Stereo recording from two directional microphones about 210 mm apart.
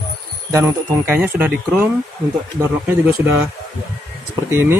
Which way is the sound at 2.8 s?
10° right (ahead or behind).